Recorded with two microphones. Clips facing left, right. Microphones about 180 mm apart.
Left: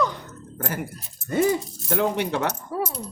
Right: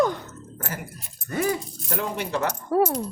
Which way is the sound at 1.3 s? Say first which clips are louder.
Left 4 dB; 20° left (ahead or behind).